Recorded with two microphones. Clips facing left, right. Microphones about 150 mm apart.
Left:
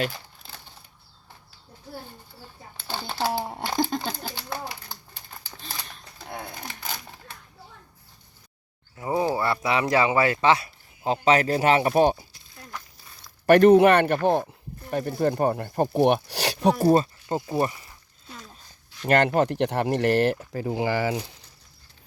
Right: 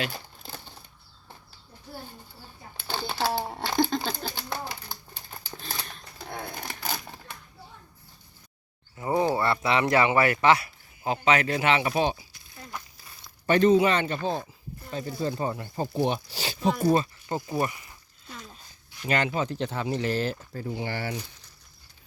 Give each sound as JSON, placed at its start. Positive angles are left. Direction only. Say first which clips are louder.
{"t": 2.9, "sound": "shuffling cards", "louder": "right 1 dB", "side_deg": -5}
{"t": 3.4, "sound": "crumpling", "louder": "left 1 dB", "side_deg": 15}
{"t": 3.8, "sound": "a sound", "louder": "right 1 dB", "side_deg": 5}
{"t": 4.9, "sound": "crumpling", "louder": "right 1 dB", "side_deg": -10}
{"t": 9.0, "sound": "speech", "louder": "even", "side_deg": 10}
{"t": 13.5, "sound": "speech", "louder": "left 6 dB", "side_deg": 65}
{"t": 16.7, "sound": "speech", "louder": "left 4 dB", "side_deg": 35}
{"t": 19.0, "sound": "speech", "louder": "left 6 dB", "side_deg": 60}